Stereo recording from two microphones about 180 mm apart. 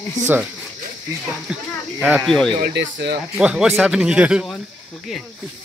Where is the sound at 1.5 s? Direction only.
5° right (ahead or behind).